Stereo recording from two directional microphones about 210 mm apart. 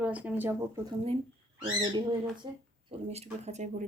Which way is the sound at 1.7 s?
20° right (ahead or behind).